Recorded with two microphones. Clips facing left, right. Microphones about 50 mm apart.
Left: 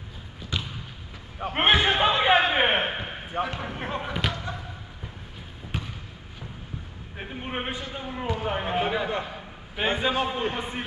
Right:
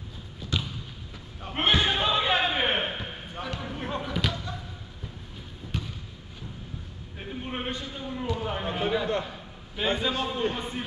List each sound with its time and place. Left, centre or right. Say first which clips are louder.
0.5 s basketball bounce: right 1 dB; left
1.4 s a sound: left 4 dB; left
5.7 s trickle: left 1 dB; centre
7.2 s a man's voice: left 2 dB; left